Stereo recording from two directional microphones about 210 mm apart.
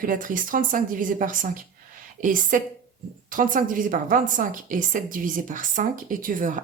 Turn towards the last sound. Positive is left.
turn(degrees=-40)  # may be behind; listen again after turning